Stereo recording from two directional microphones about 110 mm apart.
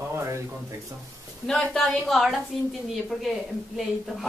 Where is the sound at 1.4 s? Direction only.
5° left (ahead or behind).